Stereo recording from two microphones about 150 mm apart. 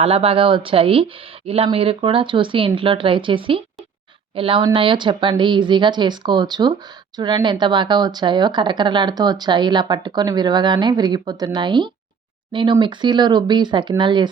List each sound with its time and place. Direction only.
0.0 s speech: 40° right (ahead or behind)